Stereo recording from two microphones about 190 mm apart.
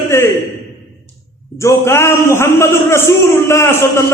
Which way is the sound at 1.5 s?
15° left (ahead or behind).